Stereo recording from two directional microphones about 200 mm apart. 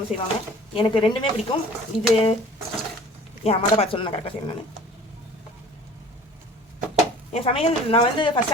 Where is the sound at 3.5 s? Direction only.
30° left (ahead or behind).